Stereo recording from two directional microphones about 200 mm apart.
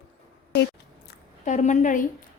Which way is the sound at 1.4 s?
40° left (ahead or behind).